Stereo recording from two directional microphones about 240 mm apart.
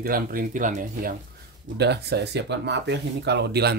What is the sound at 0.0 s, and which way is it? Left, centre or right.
Speech, right.